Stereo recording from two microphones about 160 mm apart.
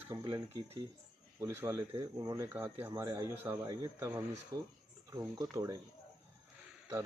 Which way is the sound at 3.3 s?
15° right (ahead or behind).